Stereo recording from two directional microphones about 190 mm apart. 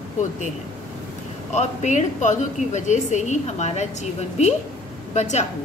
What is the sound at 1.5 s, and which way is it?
A woman's voice, 40° left (ahead or behind).